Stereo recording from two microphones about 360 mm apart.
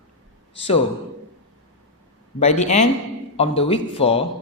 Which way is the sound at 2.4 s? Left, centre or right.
Centre.